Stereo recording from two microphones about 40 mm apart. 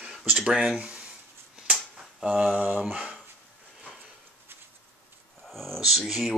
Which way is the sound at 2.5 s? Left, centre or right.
Right.